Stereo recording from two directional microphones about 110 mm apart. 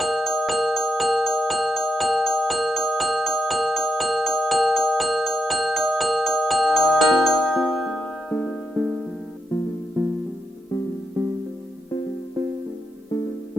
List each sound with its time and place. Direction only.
0.0 s glockenspiel: centre (ahead or behind)
8.3 s music: 10° left (ahead or behind)
8.7 s music: 10° right (ahead or behind)
10.0 s music: 20° right (ahead or behind)